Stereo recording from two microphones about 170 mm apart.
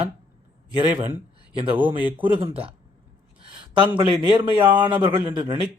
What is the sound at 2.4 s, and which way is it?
Speech, 35° right (ahead or behind).